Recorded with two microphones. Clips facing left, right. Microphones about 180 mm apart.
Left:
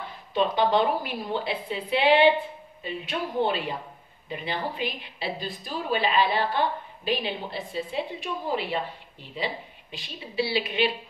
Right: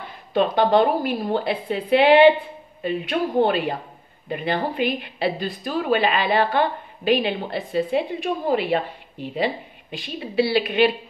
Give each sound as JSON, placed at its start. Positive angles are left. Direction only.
{"t": 0.3, "sound": "a woman's voice", "side_deg": -55}